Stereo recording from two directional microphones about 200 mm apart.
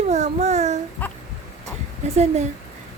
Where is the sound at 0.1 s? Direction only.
35° right (ahead or behind).